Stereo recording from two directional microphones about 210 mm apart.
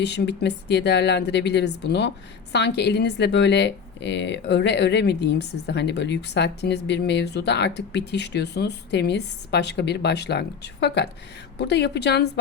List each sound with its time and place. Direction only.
0.0 s speech: 55° left (ahead or behind)